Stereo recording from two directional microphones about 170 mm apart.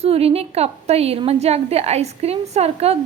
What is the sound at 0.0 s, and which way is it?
A woman's voice, 35° right (ahead or behind).